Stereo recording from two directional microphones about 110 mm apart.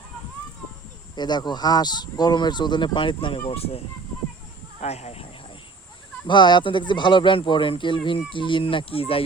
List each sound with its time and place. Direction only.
1.1 s speech: 40° left (ahead or behind); by 3.8 s 65° left (ahead or behind)
4.8 s speech: 85° left
6.2 s speech: 45° left (ahead or behind)